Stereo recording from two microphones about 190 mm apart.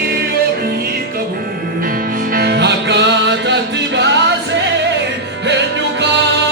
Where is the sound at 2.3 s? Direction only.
55° right (ahead or behind).